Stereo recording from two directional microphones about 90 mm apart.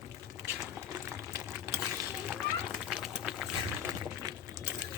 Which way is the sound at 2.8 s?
5° right (ahead or behind).